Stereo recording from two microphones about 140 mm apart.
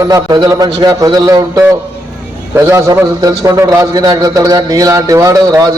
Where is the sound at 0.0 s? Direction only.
25° right (ahead or behind).